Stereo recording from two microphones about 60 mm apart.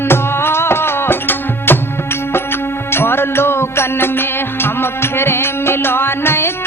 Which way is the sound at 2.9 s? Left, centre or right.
Left.